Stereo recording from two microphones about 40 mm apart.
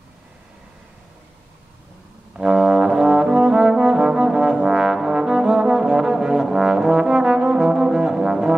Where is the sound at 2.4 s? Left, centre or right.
Right.